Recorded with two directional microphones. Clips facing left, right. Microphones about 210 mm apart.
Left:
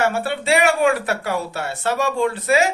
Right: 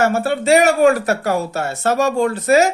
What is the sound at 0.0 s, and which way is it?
Speech, 45° right (ahead or behind).